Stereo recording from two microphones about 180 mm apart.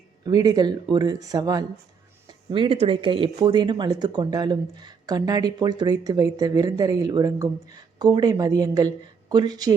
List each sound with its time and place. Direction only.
0.3 s speech: 20° right (ahead or behind)